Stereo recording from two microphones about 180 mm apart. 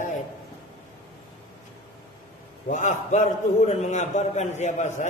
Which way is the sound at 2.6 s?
40° left (ahead or behind).